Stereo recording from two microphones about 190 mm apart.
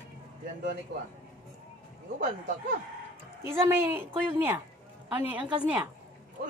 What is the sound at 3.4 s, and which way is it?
A woman's voice, 15° right (ahead or behind).